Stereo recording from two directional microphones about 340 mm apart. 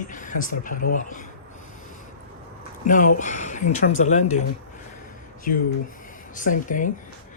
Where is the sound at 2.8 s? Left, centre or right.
Left.